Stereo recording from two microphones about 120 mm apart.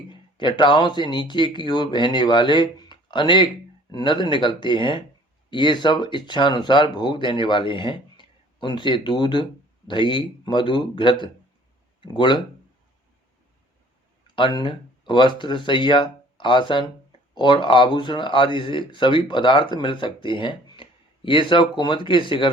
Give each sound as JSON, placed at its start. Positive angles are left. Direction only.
{"t": 0.1, "sound": "speech", "side_deg": 40}
{"t": 14.3, "sound": "speech", "side_deg": 40}